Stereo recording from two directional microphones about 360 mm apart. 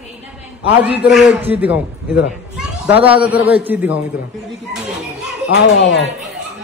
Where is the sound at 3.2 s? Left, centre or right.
Centre.